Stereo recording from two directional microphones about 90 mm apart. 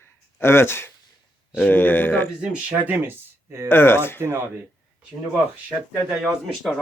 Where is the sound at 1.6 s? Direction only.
20° left (ahead or behind).